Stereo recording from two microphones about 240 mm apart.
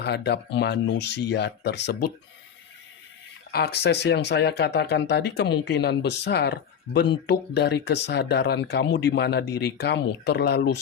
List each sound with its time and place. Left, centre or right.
0.0 s speech: left
3.5 s speech: left